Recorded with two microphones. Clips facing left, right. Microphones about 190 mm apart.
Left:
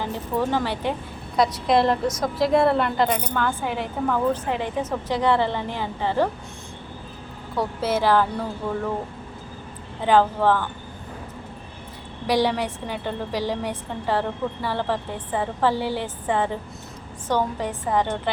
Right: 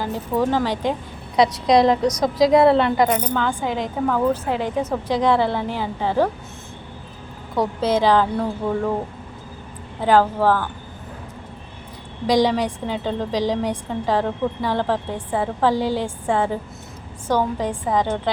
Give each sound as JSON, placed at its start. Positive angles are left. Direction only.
{"t": 0.0, "sound": "a woman's voice", "side_deg": -10}
{"t": 1.4, "sound": "a woman's voice", "side_deg": -85}
{"t": 1.8, "sound": "a woman's voice", "side_deg": -15}
{"t": 2.4, "sound": "a woman's voice", "side_deg": -75}
{"t": 3.0, "sound": "a woman's voice", "side_deg": -5}
{"t": 7.5, "sound": "a woman's voice", "side_deg": -15}
{"t": 10.0, "sound": "a woman's voice", "side_deg": -10}
{"t": 12.3, "sound": "a woman's voice", "side_deg": -15}